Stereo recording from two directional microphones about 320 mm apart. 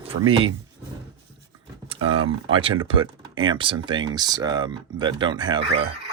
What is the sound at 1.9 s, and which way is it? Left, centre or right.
Speech, centre.